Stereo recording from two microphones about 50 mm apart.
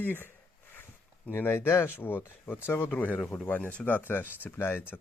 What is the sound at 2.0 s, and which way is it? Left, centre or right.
Speech, left.